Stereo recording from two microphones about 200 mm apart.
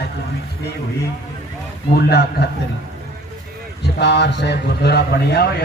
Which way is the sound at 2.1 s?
55° left (ahead or behind).